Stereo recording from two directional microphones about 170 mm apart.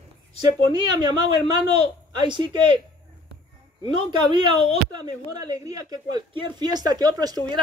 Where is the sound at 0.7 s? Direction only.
25° right (ahead or behind).